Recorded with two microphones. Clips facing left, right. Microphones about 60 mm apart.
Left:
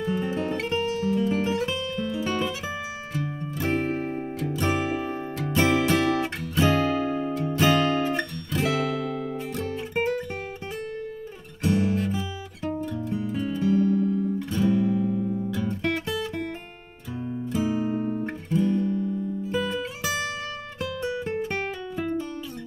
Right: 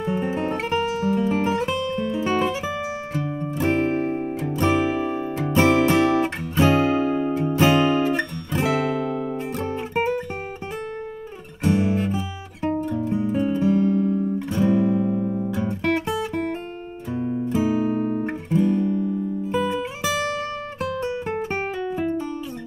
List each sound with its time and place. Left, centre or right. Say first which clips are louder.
0.0 s guitar: right 3 dB; right
3.2 s music: right 4 dB; right
11.6 s guitar: right 3 dB; right
12.8 s music: right 5 dB; right
17.1 s guitar: right 6 dB; right
19.4 s music: right 5 dB; right